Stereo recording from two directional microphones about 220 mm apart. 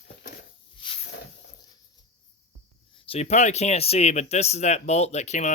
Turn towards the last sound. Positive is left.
turn(degrees=30)  # may be behind; listen again after turning